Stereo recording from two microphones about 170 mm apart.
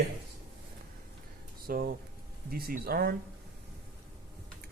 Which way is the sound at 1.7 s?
60° right (ahead or behind).